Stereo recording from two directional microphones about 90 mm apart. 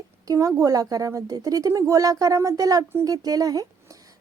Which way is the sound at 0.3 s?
40° right (ahead or behind).